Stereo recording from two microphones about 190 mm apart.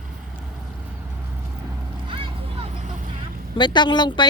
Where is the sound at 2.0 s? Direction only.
25° right (ahead or behind).